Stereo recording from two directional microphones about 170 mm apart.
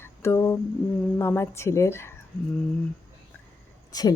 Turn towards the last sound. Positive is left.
turn(degrees=20)  # may be behind; listen again after turning